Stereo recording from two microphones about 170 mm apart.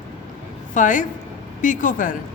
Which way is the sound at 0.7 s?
50° left (ahead or behind).